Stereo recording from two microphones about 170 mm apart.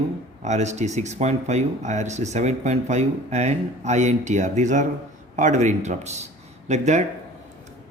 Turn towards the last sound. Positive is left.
turn(degrees=-45)  # may be behind; listen again after turning